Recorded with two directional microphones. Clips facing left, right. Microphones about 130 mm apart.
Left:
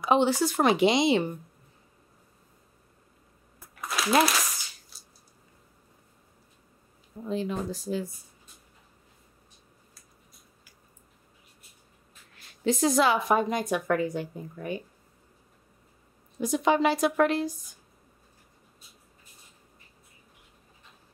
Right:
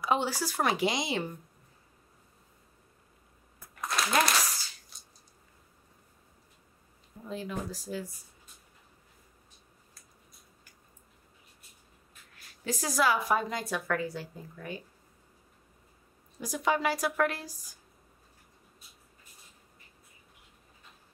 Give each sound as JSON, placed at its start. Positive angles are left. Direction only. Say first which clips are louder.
{"t": 0.0, "sound": "a woman's voice", "louder": "left 7 dB", "side_deg": 20}
{"t": 3.8, "sound": "a sound", "louder": "left 1 dB", "side_deg": 5}
{"t": 4.3, "sound": "crumpling", "louder": "even", "side_deg": 0}
{"t": 7.2, "sound": "a woman's voice", "louder": "left 6 dB", "side_deg": 25}
{"t": 12.6, "sound": "a woman's voice", "louder": "left 5 dB", "side_deg": 25}
{"t": 16.3, "sound": "a woman's voice", "louder": "left 6 dB", "side_deg": 25}